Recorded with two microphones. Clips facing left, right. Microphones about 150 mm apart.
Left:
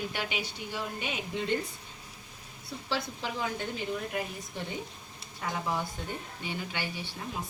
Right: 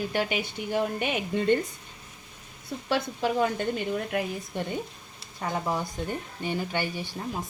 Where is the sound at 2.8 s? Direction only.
55° right (ahead or behind).